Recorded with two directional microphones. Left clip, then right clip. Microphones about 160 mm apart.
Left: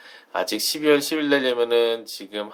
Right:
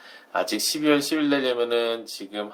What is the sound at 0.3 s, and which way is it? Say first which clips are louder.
Speech: even; 30° left (ahead or behind).